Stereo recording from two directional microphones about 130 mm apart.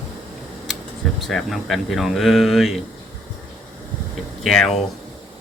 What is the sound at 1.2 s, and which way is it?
Speech, centre (ahead or behind).